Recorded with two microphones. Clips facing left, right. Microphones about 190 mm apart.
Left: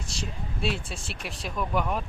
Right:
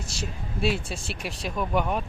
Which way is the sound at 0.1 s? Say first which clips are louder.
Even; 5° right (ahead or behind).